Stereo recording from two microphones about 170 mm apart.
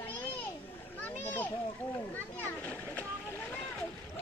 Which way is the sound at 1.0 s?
10° left (ahead or behind).